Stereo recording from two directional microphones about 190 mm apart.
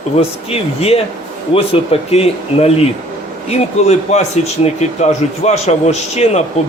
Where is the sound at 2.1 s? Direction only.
35° left (ahead or behind).